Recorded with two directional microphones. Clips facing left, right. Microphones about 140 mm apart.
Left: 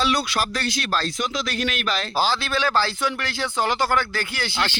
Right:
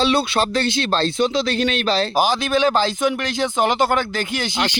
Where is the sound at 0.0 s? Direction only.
25° right (ahead or behind).